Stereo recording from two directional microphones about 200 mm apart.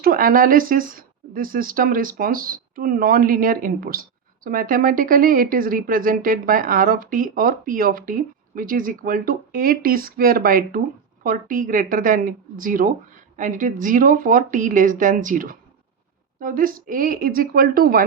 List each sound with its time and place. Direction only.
0.0 s speech: 45° right (ahead or behind)